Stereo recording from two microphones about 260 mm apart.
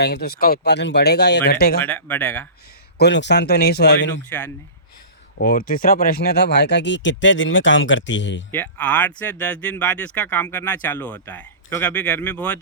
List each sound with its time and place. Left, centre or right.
0.0 s speech: left
1.8 s speech: centre
3.0 s speech: left
4.3 s speech: centre
5.4 s speech: left
8.5 s speech: centre